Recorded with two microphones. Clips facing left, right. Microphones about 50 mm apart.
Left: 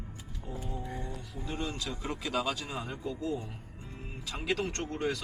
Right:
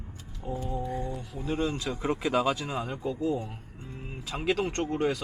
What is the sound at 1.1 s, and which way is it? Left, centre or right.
Speech, right.